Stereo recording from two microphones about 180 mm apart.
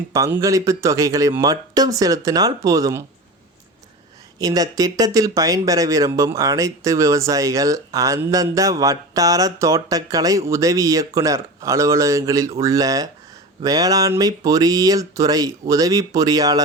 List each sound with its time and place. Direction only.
0.1 s speech: 15° right (ahead or behind)
4.4 s speech: 20° right (ahead or behind)